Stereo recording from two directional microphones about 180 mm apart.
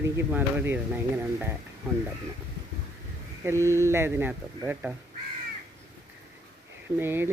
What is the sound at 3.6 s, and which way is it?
Speech, 15° right (ahead or behind).